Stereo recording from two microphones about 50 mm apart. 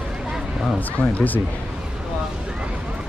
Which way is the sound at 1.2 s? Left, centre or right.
Left.